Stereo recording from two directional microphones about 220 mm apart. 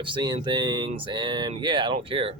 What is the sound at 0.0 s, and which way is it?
Speech, 20° right (ahead or behind).